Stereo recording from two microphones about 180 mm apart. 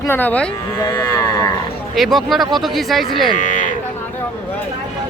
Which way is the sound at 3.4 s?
45° left (ahead or behind).